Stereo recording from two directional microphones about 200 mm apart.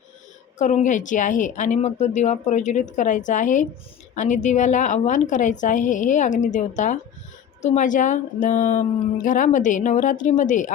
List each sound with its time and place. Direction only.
0.6 s a woman's voice: 35° left (ahead or behind)